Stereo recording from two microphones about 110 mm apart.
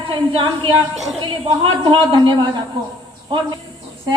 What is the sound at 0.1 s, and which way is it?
Speech, 50° right (ahead or behind).